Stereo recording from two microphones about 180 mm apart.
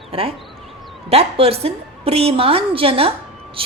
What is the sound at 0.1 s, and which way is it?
A woman's voice, 35° right (ahead or behind).